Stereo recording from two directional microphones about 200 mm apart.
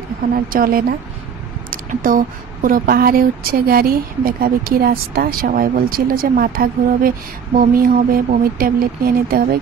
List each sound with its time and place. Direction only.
0.5 s speech: 45° right (ahead or behind)